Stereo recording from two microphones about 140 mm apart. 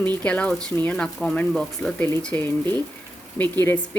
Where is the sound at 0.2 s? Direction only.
10° left (ahead or behind).